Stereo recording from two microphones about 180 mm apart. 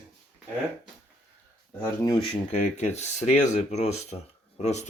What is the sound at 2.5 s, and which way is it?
Speech, 40° left (ahead or behind).